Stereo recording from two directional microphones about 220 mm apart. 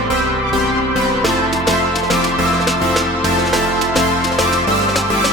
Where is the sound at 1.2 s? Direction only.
Centre (ahead or behind).